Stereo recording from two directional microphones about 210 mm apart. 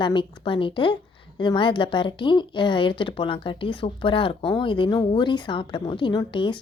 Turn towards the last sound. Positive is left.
turn(degrees=20)  # may be behind; listen again after turning